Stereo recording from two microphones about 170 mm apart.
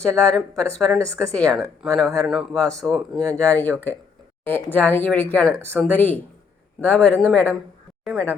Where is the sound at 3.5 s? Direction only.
10° left (ahead or behind).